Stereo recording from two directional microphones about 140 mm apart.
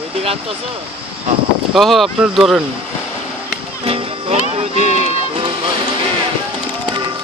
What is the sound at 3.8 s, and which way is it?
Music, 45° right (ahead or behind).